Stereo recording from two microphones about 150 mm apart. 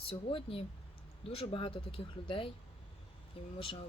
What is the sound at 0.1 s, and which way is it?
Speech, 35° left (ahead or behind).